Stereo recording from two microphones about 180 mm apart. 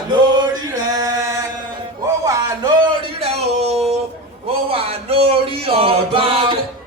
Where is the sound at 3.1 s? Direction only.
35° right (ahead or behind).